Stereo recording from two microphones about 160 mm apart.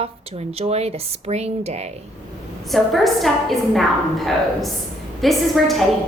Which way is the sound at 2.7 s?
Centre (ahead or behind).